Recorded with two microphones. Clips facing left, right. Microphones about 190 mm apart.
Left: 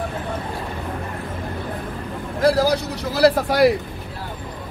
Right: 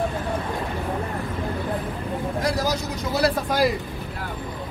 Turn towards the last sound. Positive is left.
turn(degrees=70)  # may be behind; listen again after turning